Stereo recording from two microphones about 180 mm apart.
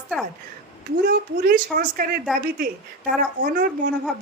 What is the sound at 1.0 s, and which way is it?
A woman's voice, 55° right (ahead or behind).